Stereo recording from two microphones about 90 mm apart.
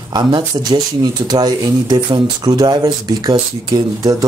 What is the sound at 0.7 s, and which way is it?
Speech, 50° right (ahead or behind).